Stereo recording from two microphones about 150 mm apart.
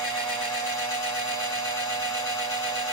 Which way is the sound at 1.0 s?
25° left (ahead or behind).